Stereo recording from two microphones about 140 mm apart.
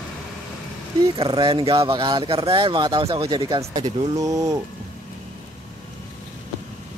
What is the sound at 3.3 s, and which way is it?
Speech, 30° right (ahead or behind).